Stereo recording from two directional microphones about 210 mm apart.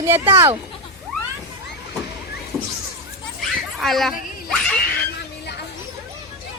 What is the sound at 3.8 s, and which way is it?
Speech, centre (ahead or behind).